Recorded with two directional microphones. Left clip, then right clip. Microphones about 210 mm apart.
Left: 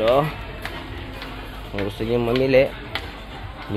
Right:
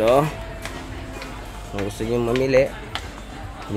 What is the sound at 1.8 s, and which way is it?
Speech, centre (ahead or behind).